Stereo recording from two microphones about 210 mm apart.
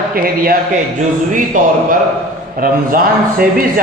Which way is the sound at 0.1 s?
45° right (ahead or behind).